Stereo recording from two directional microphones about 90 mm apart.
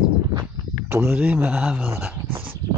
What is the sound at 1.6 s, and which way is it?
Speech, 5° right (ahead or behind).